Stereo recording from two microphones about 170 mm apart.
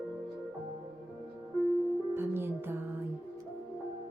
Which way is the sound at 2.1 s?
15° right (ahead or behind).